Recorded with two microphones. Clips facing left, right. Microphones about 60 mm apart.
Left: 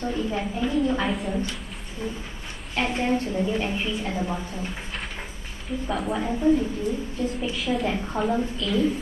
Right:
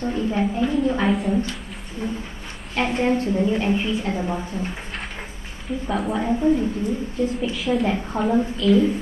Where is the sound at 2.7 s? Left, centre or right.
Centre.